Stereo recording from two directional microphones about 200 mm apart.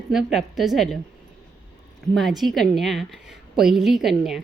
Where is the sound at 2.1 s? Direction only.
Centre (ahead or behind).